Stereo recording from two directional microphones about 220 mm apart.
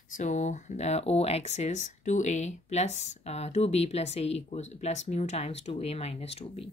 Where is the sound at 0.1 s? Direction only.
35° left (ahead or behind).